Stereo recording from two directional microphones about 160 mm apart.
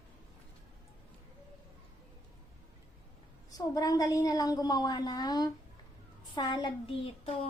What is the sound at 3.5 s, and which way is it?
A woman's voice, 20° left (ahead or behind).